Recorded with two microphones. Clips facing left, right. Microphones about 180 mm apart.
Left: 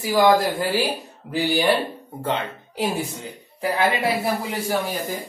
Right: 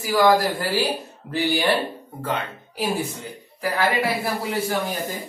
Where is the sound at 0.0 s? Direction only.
20° left (ahead or behind).